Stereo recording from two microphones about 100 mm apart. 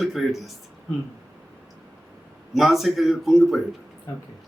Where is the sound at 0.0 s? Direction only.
Centre (ahead or behind).